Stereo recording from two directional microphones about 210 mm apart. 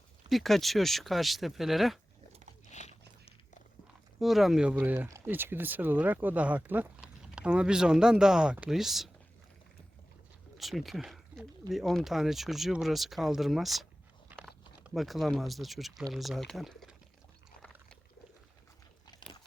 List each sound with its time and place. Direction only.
0.3 s speech: centre (ahead or behind)
2.7 s biting: 35° left (ahead or behind)
4.2 s speech: centre (ahead or behind)
10.6 s speech: centre (ahead or behind)
14.8 s speech: centre (ahead or behind)